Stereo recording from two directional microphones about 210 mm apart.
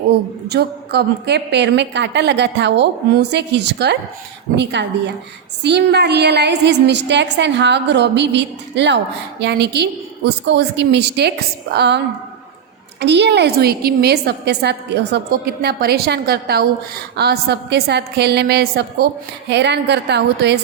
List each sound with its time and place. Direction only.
0.1 s a woman's voice: 50° right (ahead or behind)